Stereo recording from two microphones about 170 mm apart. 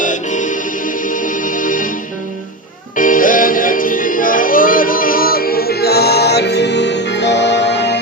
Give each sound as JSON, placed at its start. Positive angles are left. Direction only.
{"t": 0.0, "sound": "music", "side_deg": 50}
{"t": 2.9, "sound": "music", "side_deg": 50}